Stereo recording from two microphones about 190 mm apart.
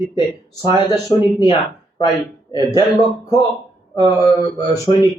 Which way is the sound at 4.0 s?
20° right (ahead or behind).